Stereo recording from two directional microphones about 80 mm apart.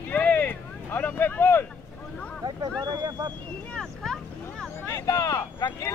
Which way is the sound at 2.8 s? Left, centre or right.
Right.